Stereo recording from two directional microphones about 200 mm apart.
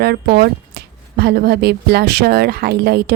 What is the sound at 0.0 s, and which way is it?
A woman's voice, 55° right (ahead or behind).